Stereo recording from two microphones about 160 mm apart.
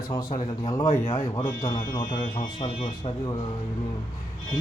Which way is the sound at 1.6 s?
20° left (ahead or behind).